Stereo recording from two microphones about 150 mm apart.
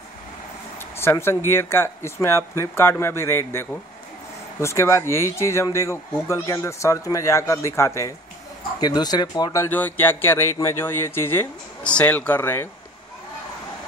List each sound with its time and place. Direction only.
0.9 s speech: 15° left (ahead or behind)